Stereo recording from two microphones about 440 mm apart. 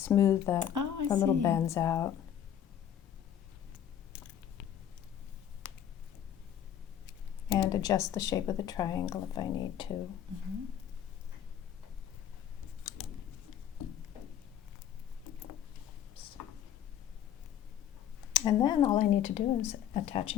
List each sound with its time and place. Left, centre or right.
0.0 s speech: centre
0.6 s a sound: right
1.1 s speech: centre
7.5 s speech: centre
18.3 s speech: centre